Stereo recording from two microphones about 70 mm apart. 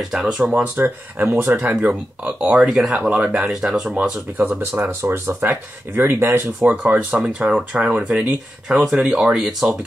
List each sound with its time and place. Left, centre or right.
0.1 s speech: centre
0.5 s speech: right
4.4 s speech: right
6.6 s speech: centre